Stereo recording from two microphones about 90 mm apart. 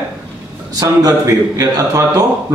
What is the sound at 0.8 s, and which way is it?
A man's voice, 40° right (ahead or behind).